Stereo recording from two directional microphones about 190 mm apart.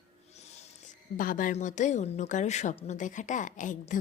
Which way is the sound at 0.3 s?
35° left (ahead or behind).